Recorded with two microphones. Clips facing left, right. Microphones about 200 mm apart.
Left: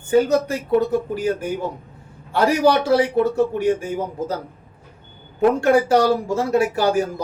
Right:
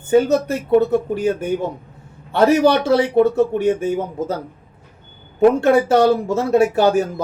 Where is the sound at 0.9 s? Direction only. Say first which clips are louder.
Right 3 dB; 25° right (ahead or behind).